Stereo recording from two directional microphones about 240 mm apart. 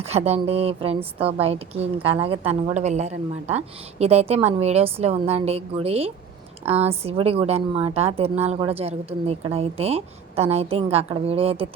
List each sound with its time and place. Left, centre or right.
0.0 s a woman's voice: right